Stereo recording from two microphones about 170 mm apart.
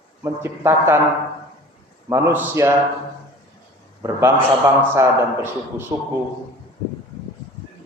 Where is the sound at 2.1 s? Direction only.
15° right (ahead or behind).